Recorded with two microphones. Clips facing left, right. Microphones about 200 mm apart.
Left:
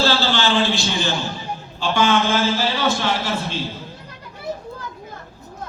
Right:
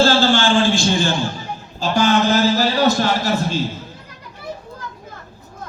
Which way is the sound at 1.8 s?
40° right (ahead or behind).